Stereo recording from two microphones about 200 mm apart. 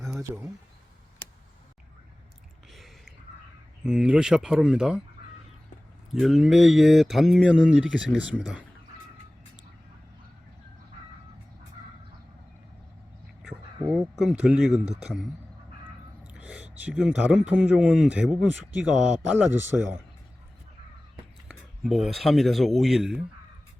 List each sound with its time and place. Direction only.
3.8 s speech: 5° right (ahead or behind)
6.1 s speech: centre (ahead or behind)
14.2 s speech: centre (ahead or behind)
16.2 s whispering: 5° right (ahead or behind)
16.8 s speech: 5° right (ahead or behind)
21.4 s speech: centre (ahead or behind)